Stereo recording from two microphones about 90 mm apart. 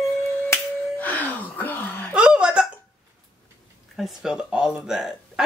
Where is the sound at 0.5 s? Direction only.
20° left (ahead or behind).